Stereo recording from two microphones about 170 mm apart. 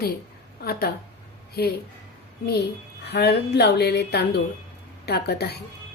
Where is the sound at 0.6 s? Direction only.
65° left (ahead or behind).